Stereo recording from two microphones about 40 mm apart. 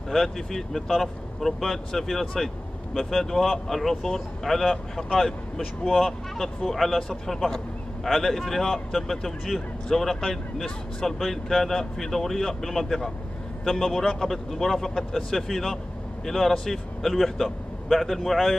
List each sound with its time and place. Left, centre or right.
0.1 s a man's voice: centre
6.3 s speech: centre
7.0 s a man's voice: centre